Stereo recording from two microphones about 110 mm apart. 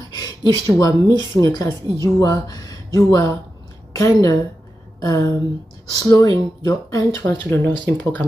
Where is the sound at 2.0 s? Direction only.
30° left (ahead or behind).